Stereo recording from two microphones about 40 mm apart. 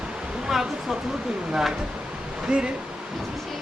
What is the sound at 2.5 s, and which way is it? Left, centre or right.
Speech, right.